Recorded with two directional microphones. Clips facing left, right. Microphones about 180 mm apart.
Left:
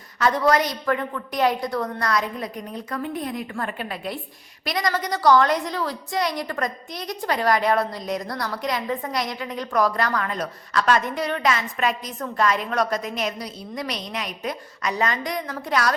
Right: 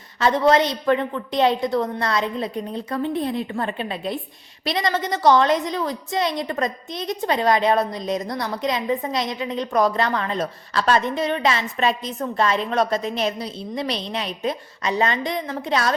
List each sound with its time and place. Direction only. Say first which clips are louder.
0.2 s a woman's voice: right 3 dB; 25° right (ahead or behind)